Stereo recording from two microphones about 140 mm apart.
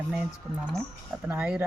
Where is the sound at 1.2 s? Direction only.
10° right (ahead or behind).